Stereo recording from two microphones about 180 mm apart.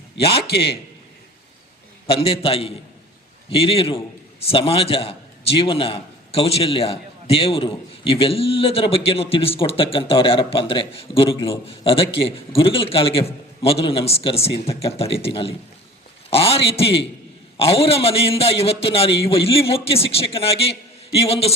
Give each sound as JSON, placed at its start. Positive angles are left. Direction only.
{"t": 0.5, "sound": "a man's voice", "side_deg": 65}
{"t": 2.2, "sound": "a man's voice", "side_deg": 30}